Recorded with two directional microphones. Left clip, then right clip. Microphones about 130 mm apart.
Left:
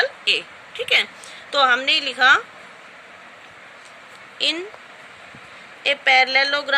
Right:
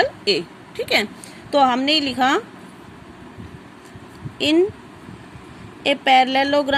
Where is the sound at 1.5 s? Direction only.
35° right (ahead or behind).